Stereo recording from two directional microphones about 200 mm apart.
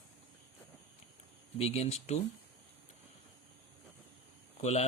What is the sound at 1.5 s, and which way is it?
Speech, 30° left (ahead or behind).